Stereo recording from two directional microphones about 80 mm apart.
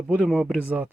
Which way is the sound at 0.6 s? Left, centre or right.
Centre.